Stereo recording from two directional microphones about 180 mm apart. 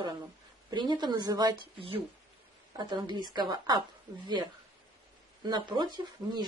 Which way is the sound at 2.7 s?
25° right (ahead or behind).